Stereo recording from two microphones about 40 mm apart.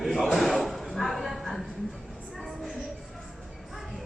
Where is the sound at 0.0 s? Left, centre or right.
Centre.